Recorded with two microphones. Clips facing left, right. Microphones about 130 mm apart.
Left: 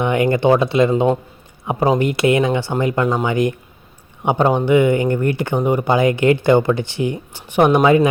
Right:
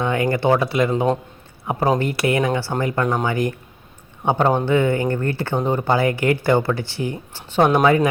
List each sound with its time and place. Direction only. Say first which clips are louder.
0.0 s speech: left 4 dB; 20° left (ahead or behind)
0.9 s speech: left 3 dB; 10° left (ahead or behind)